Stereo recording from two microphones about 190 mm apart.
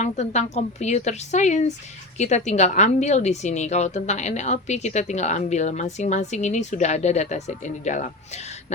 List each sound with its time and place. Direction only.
0.0 s a woman's voice: 35° left (ahead or behind)